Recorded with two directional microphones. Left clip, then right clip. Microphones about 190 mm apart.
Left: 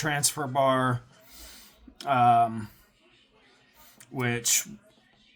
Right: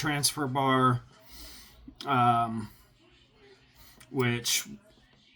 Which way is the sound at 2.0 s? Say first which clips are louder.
Left 4 dB; 45° left (ahead or behind).